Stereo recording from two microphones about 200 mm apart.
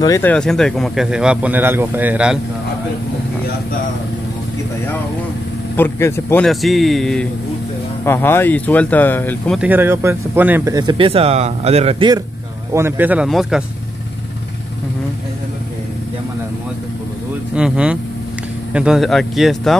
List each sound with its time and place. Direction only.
0.0 s speech: 15° left (ahead or behind); by 2.3 s 5° right (ahead or behind)
5.8 s speech: 10° left (ahead or behind)
9.6 s speech: 10° right (ahead or behind); by 12.2 s 25° right (ahead or behind)
12.7 s speech: 10° right (ahead or behind)
17.6 s speech: 5° right (ahead or behind)